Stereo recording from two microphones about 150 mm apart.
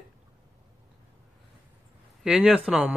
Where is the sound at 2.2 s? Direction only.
5° right (ahead or behind).